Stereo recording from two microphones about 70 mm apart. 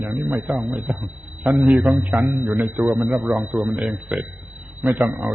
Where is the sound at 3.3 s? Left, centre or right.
Centre.